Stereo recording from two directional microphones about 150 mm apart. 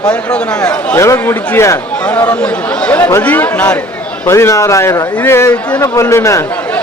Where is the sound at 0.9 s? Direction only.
20° left (ahead or behind).